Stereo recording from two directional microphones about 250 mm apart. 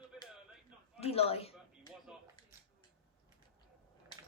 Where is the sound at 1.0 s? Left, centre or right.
Left.